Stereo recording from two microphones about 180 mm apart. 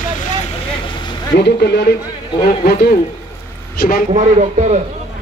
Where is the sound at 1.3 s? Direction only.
65° left (ahead or behind).